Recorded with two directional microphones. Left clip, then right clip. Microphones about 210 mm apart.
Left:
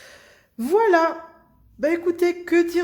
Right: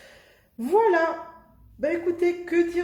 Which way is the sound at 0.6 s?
50° left (ahead or behind).